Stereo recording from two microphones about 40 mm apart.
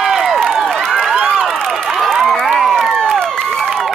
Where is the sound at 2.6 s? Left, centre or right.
Centre.